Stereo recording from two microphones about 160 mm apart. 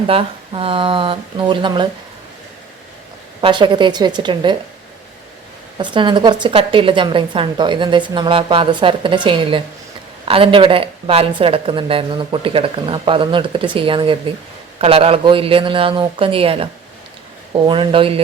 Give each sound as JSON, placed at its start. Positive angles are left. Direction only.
{"t": 0.1, "sound": "a woman's voice", "side_deg": -35}
{"t": 3.4, "sound": "a woman's voice", "side_deg": -30}
{"t": 5.7, "sound": "a woman's voice", "side_deg": -30}